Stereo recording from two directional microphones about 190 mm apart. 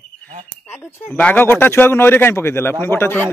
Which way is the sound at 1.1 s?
5° left (ahead or behind).